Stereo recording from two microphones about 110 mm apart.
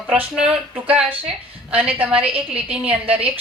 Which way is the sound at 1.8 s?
15° right (ahead or behind).